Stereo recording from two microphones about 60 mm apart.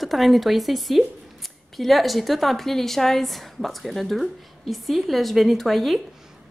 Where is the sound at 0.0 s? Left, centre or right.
Centre.